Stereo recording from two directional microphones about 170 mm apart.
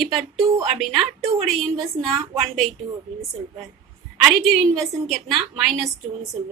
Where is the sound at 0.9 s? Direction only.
35° right (ahead or behind).